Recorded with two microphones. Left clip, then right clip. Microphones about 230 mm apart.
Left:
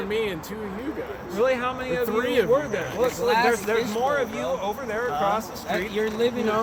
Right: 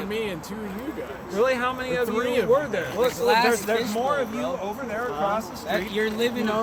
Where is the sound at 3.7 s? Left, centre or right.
Right.